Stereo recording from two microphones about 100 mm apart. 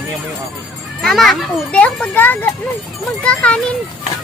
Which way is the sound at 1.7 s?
10° left (ahead or behind).